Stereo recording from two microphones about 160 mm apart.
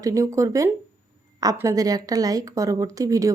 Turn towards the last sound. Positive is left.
turn(degrees=-20)  # may be behind; listen again after turning